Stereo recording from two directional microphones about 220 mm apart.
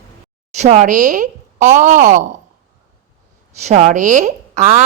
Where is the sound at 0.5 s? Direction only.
30° right (ahead or behind).